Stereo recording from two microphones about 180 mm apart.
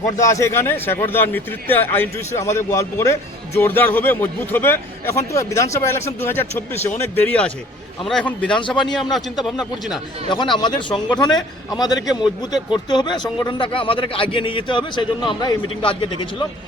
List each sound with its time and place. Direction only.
0.2 s a man's voice: 15° left (ahead or behind); by 10.0 s centre (ahead or behind)
10.5 s a man's voice: 25° left (ahead or behind)